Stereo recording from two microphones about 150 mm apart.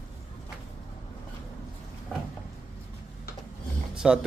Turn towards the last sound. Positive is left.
turn(degrees=-5)  # may be behind; listen again after turning